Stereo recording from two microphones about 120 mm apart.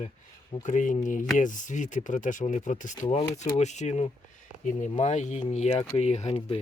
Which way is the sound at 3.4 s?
70° left (ahead or behind).